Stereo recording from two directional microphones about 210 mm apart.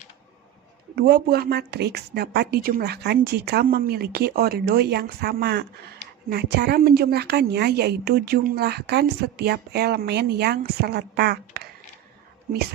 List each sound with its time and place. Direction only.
0.9 s a woman's voice: 50° right (ahead or behind)